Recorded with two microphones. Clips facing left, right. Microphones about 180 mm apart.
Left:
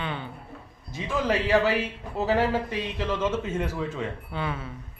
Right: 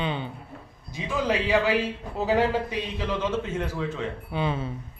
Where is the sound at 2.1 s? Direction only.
Centre (ahead or behind).